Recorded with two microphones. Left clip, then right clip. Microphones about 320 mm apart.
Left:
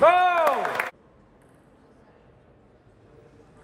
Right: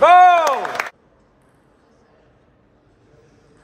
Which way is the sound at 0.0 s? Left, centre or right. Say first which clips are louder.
Right 8 dB; right.